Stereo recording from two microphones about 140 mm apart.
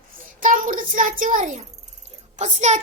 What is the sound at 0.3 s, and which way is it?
A child's voice, 75° right (ahead or behind).